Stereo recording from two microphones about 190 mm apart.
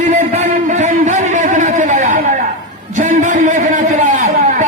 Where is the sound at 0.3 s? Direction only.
40° right (ahead or behind).